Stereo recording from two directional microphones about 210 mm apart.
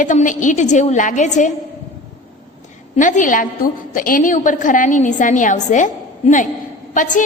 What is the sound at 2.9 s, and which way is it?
A woman's voice, 40° left (ahead or behind).